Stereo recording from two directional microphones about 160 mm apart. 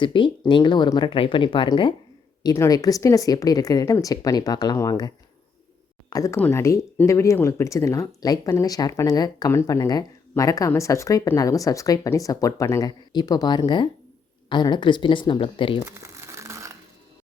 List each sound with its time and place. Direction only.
0.0 s speech: 30° left (ahead or behind)
15.8 s crumpling: 15° right (ahead or behind)